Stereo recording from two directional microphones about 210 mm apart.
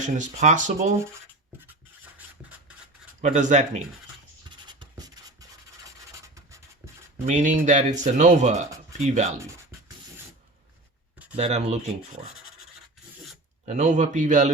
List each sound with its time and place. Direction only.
0.0 s speech: 35° right (ahead or behind)
3.2 s speech: 35° right (ahead or behind)
4.4 s writing: 20° right (ahead or behind)
7.3 s speech: 35° right (ahead or behind)
11.3 s speech: 30° right (ahead or behind)
13.7 s speech: 35° right (ahead or behind)